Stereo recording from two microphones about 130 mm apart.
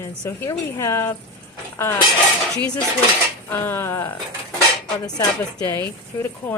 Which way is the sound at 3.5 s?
15° left (ahead or behind).